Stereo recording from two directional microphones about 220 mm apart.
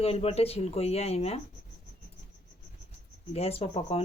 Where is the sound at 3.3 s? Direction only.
25° left (ahead or behind).